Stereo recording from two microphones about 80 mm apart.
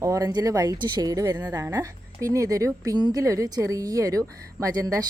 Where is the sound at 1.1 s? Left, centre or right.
Right.